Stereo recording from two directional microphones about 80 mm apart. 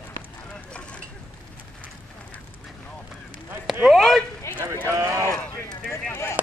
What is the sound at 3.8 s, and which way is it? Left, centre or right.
Speech, centre.